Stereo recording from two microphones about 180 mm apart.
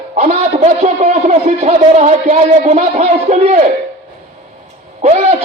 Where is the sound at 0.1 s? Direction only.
40° right (ahead or behind).